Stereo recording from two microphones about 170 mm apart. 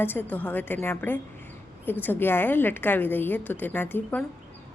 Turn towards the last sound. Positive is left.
turn(degrees=10)  # may be behind; listen again after turning